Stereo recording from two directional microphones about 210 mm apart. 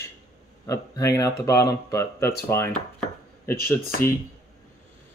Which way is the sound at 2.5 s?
5° left (ahead or behind).